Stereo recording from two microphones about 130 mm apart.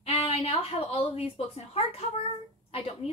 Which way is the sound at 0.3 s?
50° left (ahead or behind).